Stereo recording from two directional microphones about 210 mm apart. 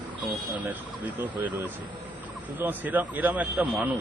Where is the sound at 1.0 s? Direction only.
10° right (ahead or behind).